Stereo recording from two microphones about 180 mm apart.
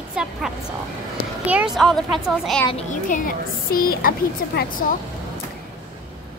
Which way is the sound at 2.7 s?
45° left (ahead or behind).